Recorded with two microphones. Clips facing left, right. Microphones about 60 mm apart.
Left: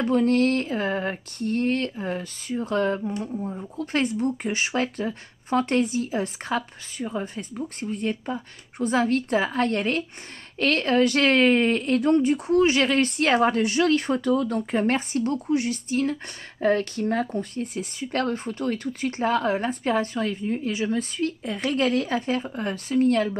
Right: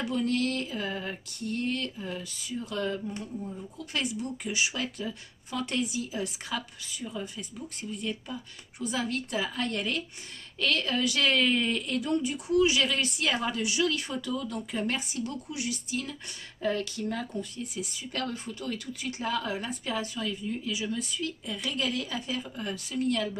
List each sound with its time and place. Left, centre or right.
0.0 s speech: left